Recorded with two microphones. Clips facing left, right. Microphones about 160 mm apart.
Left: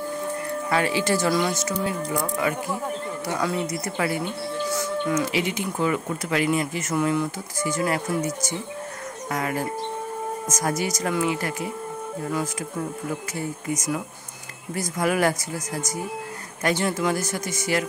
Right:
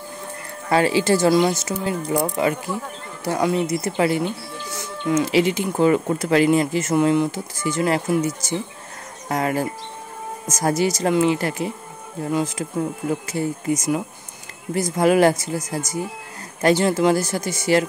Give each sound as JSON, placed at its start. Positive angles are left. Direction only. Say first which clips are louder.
{"t": 0.7, "sound": "speech", "louder": "right 6 dB", "side_deg": -30}